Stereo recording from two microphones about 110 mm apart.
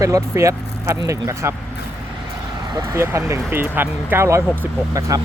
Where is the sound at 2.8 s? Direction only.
25° right (ahead or behind).